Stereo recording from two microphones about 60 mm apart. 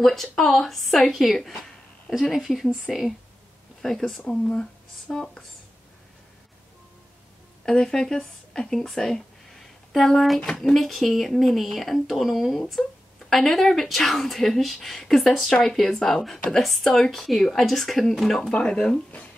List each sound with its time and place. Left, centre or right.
0.0 s speech: centre
4.3 s speech: centre
7.6 s speech: centre
18.5 s speech: centre